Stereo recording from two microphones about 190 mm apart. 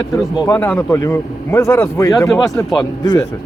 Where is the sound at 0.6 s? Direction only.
10° left (ahead or behind).